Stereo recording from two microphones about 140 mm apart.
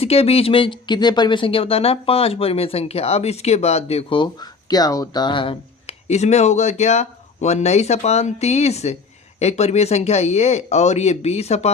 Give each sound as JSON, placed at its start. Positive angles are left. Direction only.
{"t": 0.0, "sound": "speech", "side_deg": 45}